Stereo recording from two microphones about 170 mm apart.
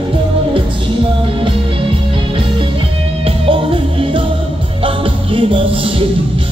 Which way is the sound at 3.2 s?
30° right (ahead or behind).